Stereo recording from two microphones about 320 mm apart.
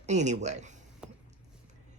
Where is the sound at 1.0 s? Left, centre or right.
Centre.